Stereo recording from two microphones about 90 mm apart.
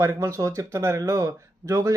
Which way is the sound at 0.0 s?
30° right (ahead or behind).